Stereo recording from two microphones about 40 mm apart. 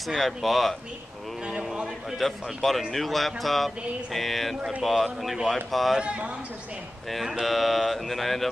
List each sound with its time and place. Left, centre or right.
0.0 s speech: centre
1.4 s speech: centre
2.1 s speech: centre
5.9 s a man's voice: right
7.4 s speech: centre